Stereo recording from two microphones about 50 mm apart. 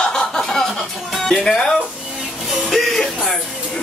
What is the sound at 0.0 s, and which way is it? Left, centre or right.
Music, centre.